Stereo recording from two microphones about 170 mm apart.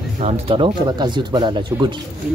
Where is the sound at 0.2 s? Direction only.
35° right (ahead or behind).